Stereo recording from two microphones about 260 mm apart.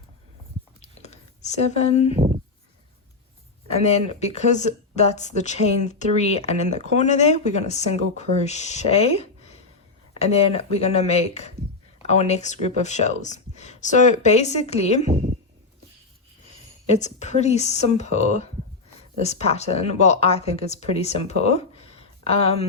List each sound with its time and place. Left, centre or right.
0.8 s a sound: left
2.1 s speech: right
3.8 s speech: left
16.9 s speech: left